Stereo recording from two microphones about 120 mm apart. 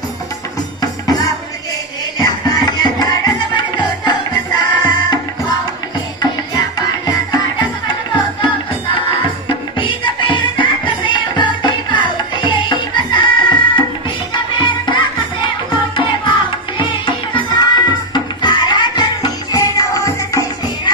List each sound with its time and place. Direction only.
0.7 s music: 30° left (ahead or behind)
7.1 s music: 35° left (ahead or behind)
9.5 s music: 45° left (ahead or behind)
16.7 s music: 40° left (ahead or behind)